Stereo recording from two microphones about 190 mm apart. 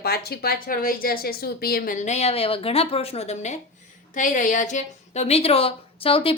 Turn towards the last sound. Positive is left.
turn(degrees=30)  # may be behind; listen again after turning